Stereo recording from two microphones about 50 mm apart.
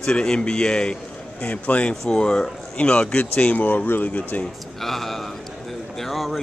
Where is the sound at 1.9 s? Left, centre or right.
Centre.